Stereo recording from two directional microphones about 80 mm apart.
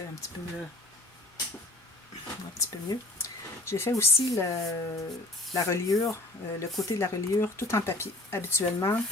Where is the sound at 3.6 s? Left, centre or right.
Left.